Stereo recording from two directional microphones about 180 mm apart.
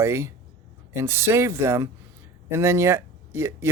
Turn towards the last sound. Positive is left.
turn(degrees=-15)  # may be behind; listen again after turning